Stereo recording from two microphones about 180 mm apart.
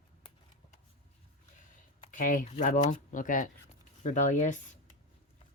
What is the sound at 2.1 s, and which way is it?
Speech, 45° left (ahead or behind).